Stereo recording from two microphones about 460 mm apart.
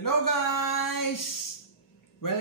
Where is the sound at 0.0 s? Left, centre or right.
Left.